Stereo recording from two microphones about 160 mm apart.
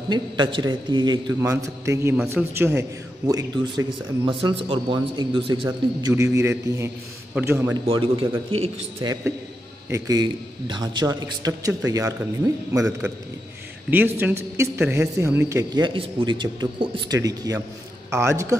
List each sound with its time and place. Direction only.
0.1 s a man's voice: 30° right (ahead or behind)
5.7 s a man's voice: 20° right (ahead or behind)
7.8 s speech: 30° right (ahead or behind)
9.8 s a man's voice: 20° right (ahead or behind)